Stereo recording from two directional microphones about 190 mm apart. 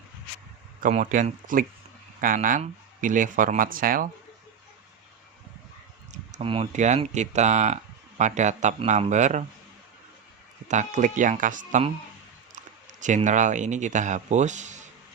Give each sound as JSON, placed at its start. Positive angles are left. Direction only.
{"t": 0.8, "sound": "speech", "side_deg": -40}
{"t": 6.3, "sound": "speech", "side_deg": -30}
{"t": 10.7, "sound": "speech", "side_deg": -40}
{"t": 12.9, "sound": "speech", "side_deg": -40}